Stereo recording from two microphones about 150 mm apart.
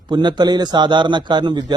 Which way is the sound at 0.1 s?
30° right (ahead or behind).